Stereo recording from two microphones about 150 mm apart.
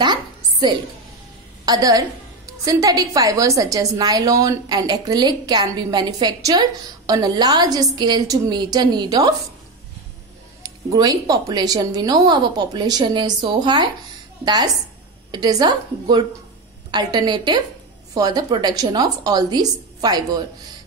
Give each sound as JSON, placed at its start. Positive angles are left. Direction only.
{"t": 0.0, "sound": "music", "side_deg": -30}
{"t": 1.7, "sound": "a woman's voice", "side_deg": -25}
{"t": 10.6, "sound": "a woman's voice", "side_deg": -25}